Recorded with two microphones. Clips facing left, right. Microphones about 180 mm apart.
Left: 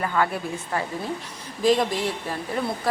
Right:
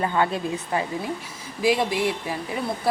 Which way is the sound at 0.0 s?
25° right (ahead or behind).